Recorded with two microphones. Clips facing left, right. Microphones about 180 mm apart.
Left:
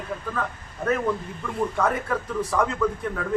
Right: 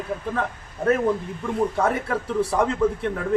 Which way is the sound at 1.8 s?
30° right (ahead or behind).